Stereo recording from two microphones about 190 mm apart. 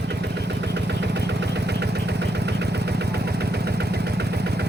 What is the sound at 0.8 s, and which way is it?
Vehicle, 60° right (ahead or behind).